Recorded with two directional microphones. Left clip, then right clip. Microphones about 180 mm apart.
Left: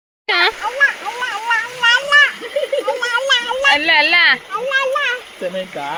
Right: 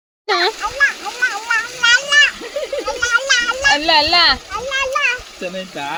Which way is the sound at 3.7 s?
35° right (ahead or behind).